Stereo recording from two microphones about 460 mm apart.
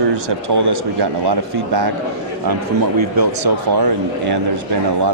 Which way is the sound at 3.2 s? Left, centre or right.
Right.